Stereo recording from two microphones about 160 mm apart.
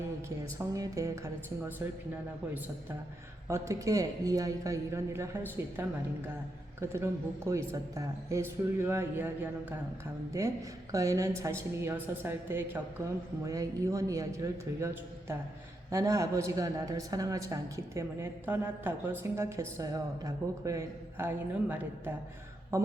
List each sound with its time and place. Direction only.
0.6 s a man's voice: 20° right (ahead or behind)
3.5 s a man's voice: 20° right (ahead or behind)
10.9 s a man's voice: 20° right (ahead or behind)